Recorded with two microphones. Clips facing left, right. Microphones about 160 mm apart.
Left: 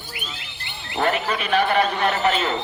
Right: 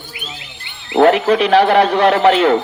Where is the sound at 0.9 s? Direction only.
80° right.